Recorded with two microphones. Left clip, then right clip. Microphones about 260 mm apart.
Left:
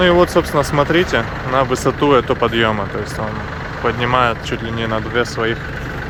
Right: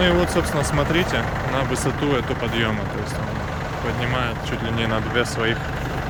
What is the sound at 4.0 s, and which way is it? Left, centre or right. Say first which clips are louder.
Speech: left 11 dB; centre.